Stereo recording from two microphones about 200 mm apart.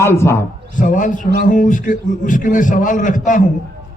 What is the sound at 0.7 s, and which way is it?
A man's voice, 40° left (ahead or behind).